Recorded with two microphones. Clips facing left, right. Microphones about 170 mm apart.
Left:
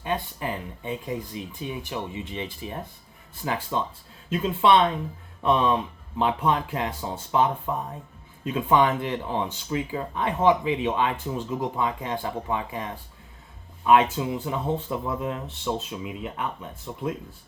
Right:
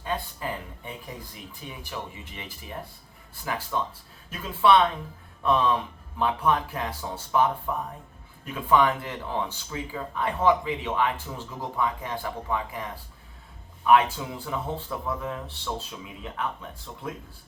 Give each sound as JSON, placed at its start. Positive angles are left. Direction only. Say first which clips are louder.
{"t": 0.0, "sound": "speech", "louder": "left 2 dB", "side_deg": 20}